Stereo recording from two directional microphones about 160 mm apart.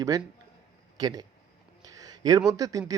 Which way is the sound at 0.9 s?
25° right (ahead or behind).